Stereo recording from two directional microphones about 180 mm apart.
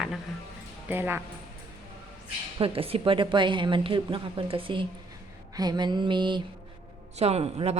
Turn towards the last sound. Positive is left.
turn(degrees=-35)  # may be behind; listen again after turning